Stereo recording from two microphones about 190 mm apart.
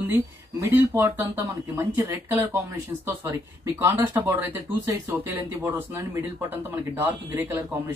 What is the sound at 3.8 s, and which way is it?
Speech, 15° right (ahead or behind).